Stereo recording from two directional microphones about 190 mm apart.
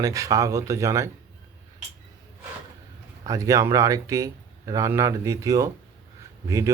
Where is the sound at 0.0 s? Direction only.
15° right (ahead or behind).